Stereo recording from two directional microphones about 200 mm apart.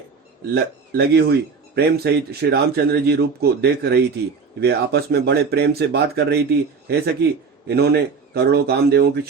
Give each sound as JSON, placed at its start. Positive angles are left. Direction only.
{"t": 0.5, "sound": "speech", "side_deg": -55}